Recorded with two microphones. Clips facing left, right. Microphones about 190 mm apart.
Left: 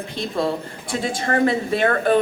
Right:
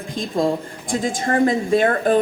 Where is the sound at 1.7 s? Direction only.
35° right (ahead or behind).